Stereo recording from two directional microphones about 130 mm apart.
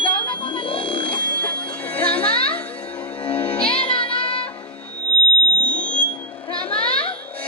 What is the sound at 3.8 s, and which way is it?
Music, 45° left (ahead or behind).